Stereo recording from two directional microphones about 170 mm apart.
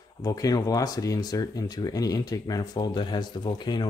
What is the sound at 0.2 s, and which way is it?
Speech, 20° left (ahead or behind).